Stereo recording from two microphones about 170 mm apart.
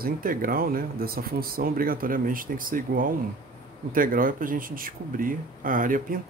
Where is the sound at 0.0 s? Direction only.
55° right (ahead or behind).